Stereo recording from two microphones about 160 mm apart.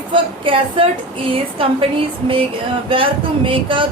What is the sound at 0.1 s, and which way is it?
Speech, 35° right (ahead or behind).